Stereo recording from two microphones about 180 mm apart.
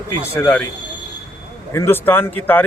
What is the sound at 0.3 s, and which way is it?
Speech, 15° left (ahead or behind).